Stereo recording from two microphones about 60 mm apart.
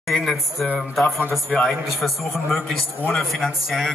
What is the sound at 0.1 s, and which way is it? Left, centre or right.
A man's voice, centre.